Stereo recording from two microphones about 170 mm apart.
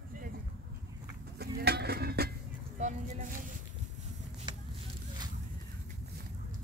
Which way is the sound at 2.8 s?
45° right (ahead or behind).